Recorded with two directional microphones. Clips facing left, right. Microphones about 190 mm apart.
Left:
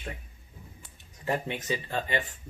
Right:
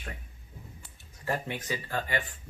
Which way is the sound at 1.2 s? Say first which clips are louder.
Left 2 dB; 20° left (ahead or behind).